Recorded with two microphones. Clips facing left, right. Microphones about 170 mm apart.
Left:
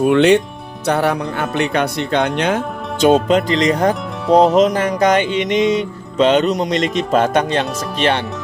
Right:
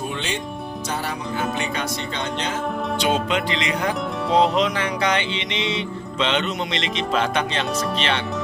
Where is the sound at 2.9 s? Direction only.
45° left (ahead or behind).